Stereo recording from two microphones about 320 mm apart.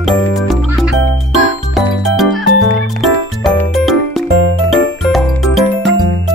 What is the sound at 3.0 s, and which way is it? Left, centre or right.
Music, centre.